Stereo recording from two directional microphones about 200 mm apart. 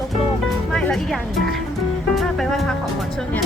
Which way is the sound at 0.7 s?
5° left (ahead or behind).